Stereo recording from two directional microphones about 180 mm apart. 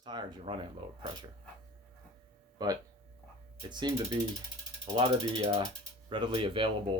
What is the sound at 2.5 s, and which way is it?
Speech, 20° right (ahead or behind).